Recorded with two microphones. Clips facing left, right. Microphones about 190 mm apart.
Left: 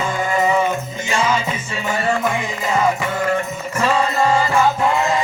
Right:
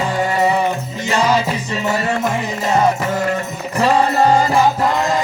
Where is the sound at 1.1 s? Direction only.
40° right (ahead or behind).